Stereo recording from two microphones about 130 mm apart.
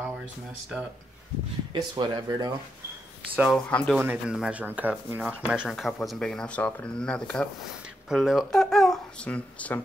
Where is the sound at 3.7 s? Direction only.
10° left (ahead or behind).